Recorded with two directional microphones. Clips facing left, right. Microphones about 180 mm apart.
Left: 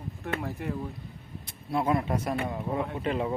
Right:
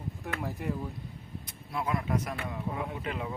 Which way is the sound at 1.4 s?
30° left (ahead or behind).